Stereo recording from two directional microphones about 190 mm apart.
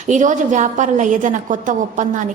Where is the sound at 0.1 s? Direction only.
40° right (ahead or behind).